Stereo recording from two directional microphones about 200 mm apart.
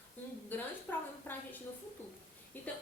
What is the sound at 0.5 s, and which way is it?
Speech, 10° left (ahead or behind).